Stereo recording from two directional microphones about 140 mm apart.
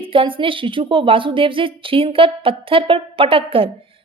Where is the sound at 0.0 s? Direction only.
40° right (ahead or behind).